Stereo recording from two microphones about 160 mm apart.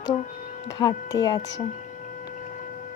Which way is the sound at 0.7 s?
25° left (ahead or behind).